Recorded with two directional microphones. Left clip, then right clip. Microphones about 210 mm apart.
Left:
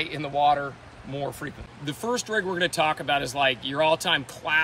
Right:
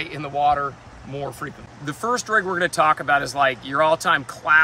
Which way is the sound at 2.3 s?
Centre (ahead or behind).